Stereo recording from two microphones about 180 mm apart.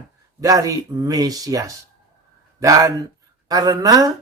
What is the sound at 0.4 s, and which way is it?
A man's voice, 20° right (ahead or behind).